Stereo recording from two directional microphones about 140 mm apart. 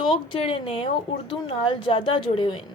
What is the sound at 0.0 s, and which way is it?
A woman's voice, 40° left (ahead or behind).